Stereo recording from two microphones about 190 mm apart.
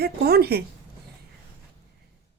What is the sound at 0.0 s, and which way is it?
Speech, 55° right (ahead or behind).